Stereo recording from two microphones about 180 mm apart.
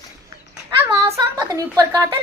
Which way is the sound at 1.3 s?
20° right (ahead or behind).